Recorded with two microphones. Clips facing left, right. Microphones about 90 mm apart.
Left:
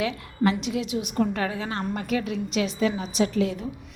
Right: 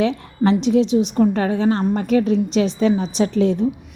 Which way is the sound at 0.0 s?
30° right (ahead or behind).